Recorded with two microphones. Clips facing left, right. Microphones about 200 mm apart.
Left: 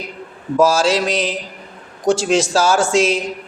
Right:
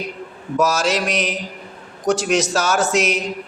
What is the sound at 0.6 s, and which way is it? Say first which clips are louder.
A man's voice: left 4 dB; 30° left (ahead or behind).